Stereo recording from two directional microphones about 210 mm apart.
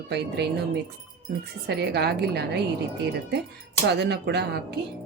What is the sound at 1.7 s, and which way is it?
Speech, 55° right (ahead or behind).